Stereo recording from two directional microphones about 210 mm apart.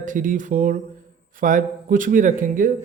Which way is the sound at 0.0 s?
40° right (ahead or behind).